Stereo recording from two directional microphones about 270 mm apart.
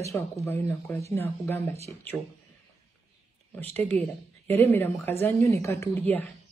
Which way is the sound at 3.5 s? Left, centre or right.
Centre.